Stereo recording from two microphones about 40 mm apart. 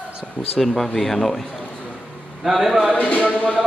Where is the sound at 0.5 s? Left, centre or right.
Centre.